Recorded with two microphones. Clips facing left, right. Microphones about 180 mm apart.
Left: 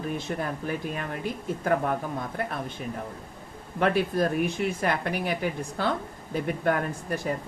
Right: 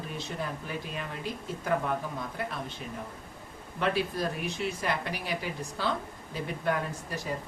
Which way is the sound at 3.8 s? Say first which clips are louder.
Left 5 dB; 55° left (ahead or behind).